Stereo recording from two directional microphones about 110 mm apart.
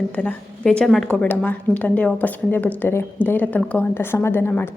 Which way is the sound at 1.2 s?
15° left (ahead or behind).